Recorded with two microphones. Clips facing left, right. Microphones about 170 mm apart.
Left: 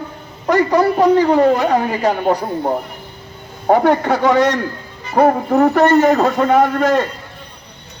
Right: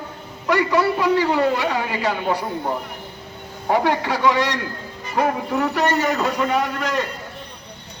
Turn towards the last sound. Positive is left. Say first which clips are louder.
# left 9 dB
turn(degrees=50)  # may be behind; listen again after turning